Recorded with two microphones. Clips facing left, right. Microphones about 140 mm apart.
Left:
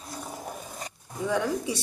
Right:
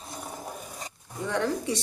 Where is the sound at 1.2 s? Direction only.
10° left (ahead or behind).